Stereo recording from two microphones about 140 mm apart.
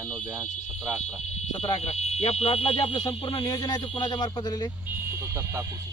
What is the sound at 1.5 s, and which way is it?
Speech, 45° left (ahead or behind).